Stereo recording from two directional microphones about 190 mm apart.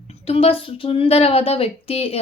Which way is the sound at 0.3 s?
30° left (ahead or behind).